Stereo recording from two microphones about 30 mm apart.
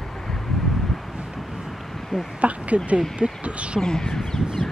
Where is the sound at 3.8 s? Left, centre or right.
Left.